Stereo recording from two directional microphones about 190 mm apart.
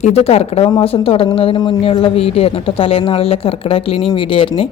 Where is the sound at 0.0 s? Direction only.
35° left (ahead or behind).